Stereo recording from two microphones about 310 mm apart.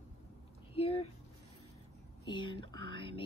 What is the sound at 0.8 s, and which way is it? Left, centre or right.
Speech, centre.